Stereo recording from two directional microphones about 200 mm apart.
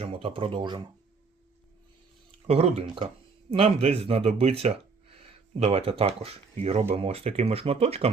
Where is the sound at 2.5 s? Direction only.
30° right (ahead or behind).